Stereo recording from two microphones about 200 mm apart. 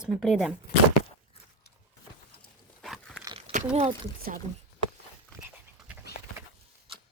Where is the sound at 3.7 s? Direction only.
35° right (ahead or behind).